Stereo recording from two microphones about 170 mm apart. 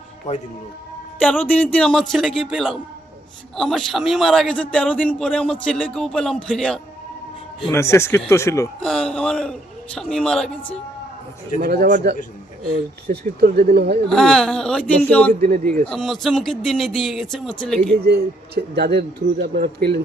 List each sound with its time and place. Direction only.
1.2 s a man's voice: 10° left (ahead or behind)
7.7 s a man's voice: 15° left (ahead or behind)
8.8 s a man's voice: 5° left (ahead or behind)
11.6 s a man's voice: 60° right (ahead or behind)
14.1 s a man's voice: 5° left (ahead or behind)
15.3 s a man's voice: 50° right (ahead or behind)
15.9 s a man's voice: 5° left (ahead or behind)
18.0 s speech: 70° right (ahead or behind)